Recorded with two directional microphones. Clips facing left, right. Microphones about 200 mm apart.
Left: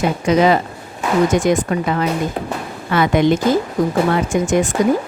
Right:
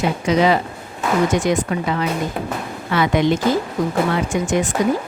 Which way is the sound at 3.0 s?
50° left (ahead or behind).